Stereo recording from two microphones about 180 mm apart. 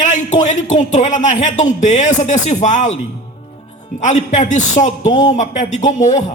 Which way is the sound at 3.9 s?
40° left (ahead or behind).